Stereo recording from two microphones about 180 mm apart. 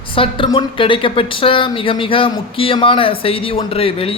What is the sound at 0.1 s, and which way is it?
A woman's voice, 30° left (ahead or behind).